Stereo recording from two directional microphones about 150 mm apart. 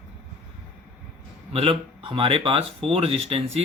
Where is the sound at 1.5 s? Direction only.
40° right (ahead or behind).